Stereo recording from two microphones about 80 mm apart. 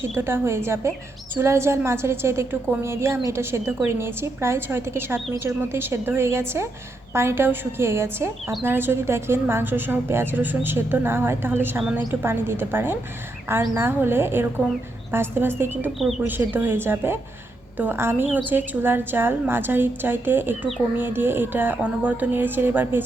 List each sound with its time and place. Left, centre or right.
0.2 s a woman's voice: right